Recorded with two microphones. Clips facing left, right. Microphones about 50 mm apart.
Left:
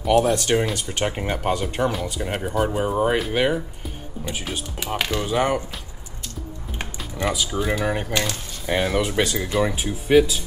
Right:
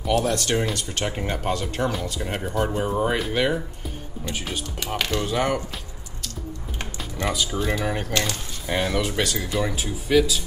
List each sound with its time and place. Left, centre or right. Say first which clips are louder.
0.1 s speech: left 4 dB; centre
7.2 s speech: left 2 dB; centre; by 10.4 s left